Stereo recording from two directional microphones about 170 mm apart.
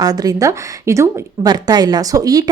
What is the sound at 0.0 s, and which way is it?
A woman's voice, 25° right (ahead or behind).